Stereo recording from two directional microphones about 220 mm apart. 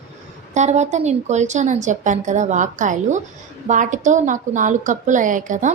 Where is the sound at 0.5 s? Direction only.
30° right (ahead or behind).